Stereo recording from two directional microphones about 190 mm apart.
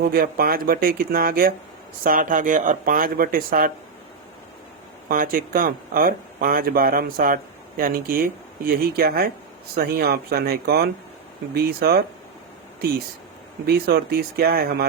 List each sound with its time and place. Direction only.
0.0 s speech: 55° right (ahead or behind)
5.0 s speech: 50° right (ahead or behind)
13.7 s speech: 60° right (ahead or behind)